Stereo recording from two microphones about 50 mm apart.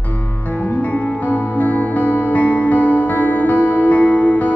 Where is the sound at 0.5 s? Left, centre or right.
Left.